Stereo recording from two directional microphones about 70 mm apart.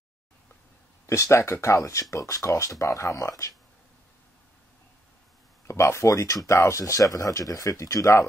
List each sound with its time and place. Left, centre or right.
1.0 s speech: left
5.7 s speech: left